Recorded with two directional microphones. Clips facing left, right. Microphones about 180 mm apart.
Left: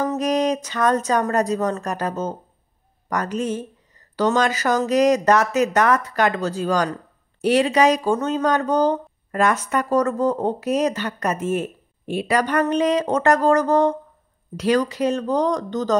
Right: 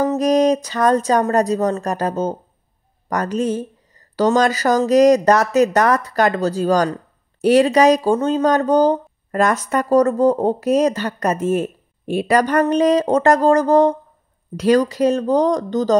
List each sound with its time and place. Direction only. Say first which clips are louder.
0.0 s speech: right 5 dB; 35° right (ahead or behind)